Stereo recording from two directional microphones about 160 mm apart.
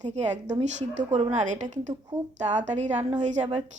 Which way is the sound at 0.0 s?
45° right (ahead or behind).